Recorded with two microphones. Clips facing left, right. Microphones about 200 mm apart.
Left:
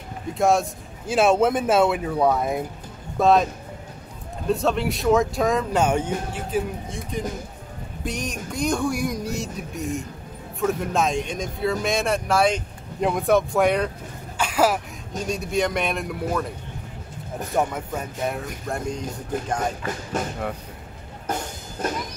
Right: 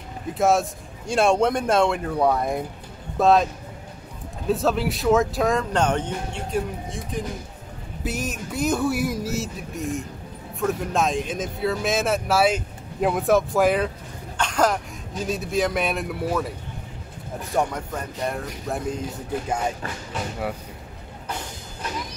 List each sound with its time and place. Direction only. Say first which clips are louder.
0.3 s speech: even; centre (ahead or behind)
4.5 s speech: even; centre (ahead or behind)
17.6 s speech: even; 5° left (ahead or behind)
20.1 s speech: left 4 dB; 45° left (ahead or behind)
21.3 s music: left 5 dB; 45° left (ahead or behind)